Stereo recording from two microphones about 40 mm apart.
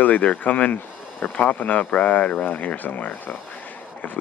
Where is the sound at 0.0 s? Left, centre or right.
Left.